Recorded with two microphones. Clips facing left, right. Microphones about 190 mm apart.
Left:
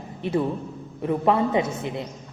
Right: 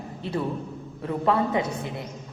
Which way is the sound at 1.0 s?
20° left (ahead or behind).